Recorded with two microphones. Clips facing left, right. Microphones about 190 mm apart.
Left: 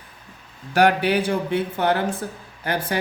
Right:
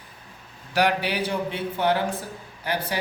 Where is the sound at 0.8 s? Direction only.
50° left (ahead or behind).